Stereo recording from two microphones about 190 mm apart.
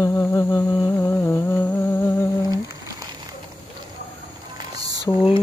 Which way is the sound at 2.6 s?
20° right (ahead or behind).